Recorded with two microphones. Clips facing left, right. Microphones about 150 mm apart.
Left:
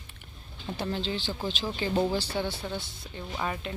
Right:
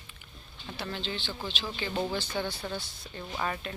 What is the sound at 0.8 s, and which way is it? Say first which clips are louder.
Speech: left 4 dB; 30° left (ahead or behind).